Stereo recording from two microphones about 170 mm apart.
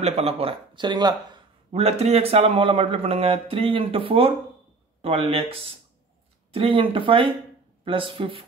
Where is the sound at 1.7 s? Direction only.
35° right (ahead or behind).